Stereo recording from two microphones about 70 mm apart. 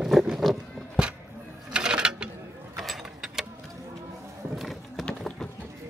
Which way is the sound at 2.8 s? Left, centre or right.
Centre.